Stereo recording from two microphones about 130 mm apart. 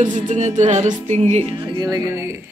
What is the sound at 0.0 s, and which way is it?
Music, 65° right (ahead or behind).